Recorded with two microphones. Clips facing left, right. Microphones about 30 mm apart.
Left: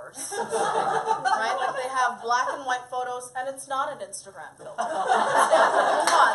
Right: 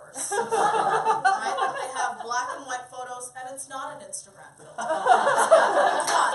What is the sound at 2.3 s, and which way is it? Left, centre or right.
A woman's voice, left.